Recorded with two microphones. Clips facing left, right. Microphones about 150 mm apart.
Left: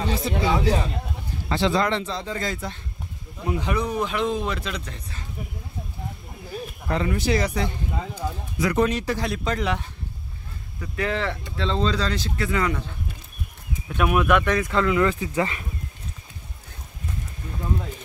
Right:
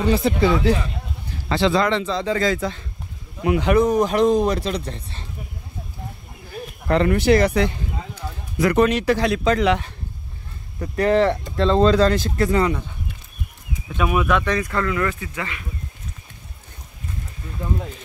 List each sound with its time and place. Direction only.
0.1 s speech: 65° right (ahead or behind)
1.5 s speech: 90° right
3.4 s speech: 75° right (ahead or behind)
3.7 s speech: 45° right (ahead or behind)
6.9 s speech: 65° right (ahead or behind); by 9.9 s 90° right
10.8 s speech: 40° right (ahead or behind)
13.9 s speech: centre (ahead or behind)
14.7 s speech: 15° left (ahead or behind)